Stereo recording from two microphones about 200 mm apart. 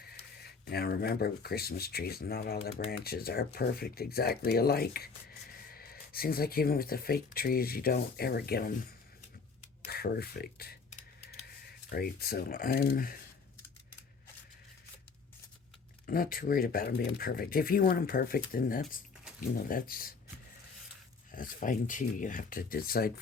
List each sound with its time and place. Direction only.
0.7 s speech: 50° left (ahead or behind)
9.8 s speech: 50° left (ahead or behind)
11.9 s speech: 50° left (ahead or behind)
16.0 s speech: 45° left (ahead or behind)
21.3 s speech: 40° left (ahead or behind)